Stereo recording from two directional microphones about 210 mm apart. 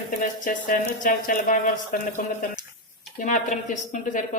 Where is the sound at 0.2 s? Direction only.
40° left (ahead or behind).